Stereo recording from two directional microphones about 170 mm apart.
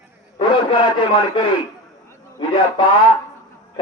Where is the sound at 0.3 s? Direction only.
30° left (ahead or behind).